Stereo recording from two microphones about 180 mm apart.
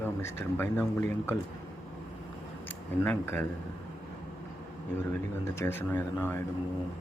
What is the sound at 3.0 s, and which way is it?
Speech, 10° left (ahead or behind).